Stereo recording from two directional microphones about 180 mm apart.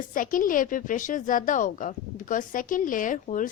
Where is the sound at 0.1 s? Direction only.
50° left (ahead or behind).